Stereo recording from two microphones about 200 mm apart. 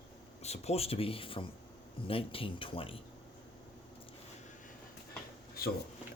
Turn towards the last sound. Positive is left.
turn(degrees=50)  # may be behind; listen again after turning